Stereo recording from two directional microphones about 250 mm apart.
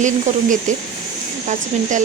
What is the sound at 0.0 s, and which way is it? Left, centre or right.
Speech, right.